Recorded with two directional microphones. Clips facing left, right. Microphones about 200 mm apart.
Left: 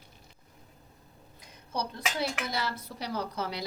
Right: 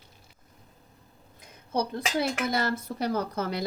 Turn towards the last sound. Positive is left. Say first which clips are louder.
# right 5 dB
turn(degrees=-50)  # may be behind; listen again after turning